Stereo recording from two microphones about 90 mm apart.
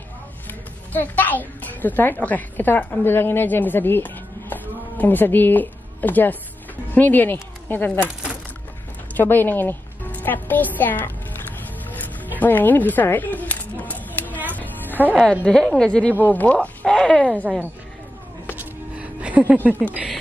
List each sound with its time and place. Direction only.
0.5 s a child's voice: 20° left (ahead or behind)
9.1 s a child's voice: 20° left (ahead or behind)
12.4 s a sound: 20° left (ahead or behind)
14.5 s music: 20° left (ahead or behind)
15.4 s speech: 5° left (ahead or behind)
18.6 s music: 15° right (ahead or behind)